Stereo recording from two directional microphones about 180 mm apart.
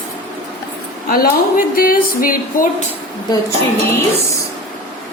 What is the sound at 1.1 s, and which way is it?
Speech, 55° left (ahead or behind).